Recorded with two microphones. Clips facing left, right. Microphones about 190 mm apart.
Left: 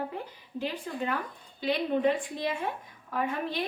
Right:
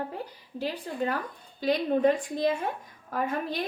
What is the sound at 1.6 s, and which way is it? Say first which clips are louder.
A woman's voice: right 3 dB; 40° right (ahead or behind).